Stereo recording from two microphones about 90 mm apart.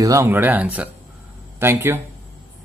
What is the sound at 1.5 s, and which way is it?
Speech, 25° right (ahead or behind).